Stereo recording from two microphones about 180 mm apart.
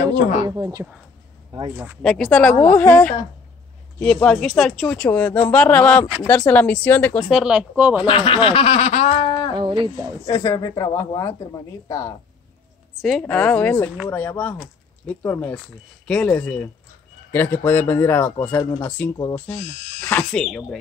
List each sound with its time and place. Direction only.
0.4 s speech: 20° right (ahead or behind)
2.0 s speech: 5° left (ahead or behind)
7.2 s speech: 5° right (ahead or behind)
8.0 s speech: 30° left (ahead or behind)
9.6 s speech: 25° right (ahead or behind)
10.2 s speech: 20° left (ahead or behind)
13.2 s speech: 10° left (ahead or behind)